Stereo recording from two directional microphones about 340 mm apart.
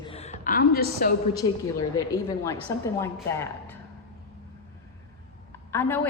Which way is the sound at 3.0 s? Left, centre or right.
Centre.